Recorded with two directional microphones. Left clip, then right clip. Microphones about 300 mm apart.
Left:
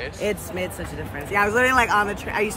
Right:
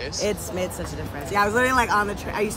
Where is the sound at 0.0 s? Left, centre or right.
Centre.